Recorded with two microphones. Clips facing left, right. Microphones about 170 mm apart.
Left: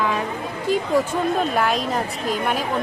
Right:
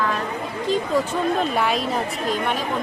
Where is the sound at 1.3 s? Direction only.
Centre (ahead or behind).